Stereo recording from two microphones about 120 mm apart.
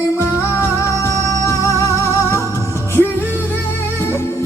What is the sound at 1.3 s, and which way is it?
Music, 25° left (ahead or behind).